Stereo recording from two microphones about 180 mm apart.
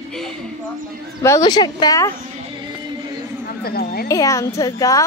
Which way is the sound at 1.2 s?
20° left (ahead or behind).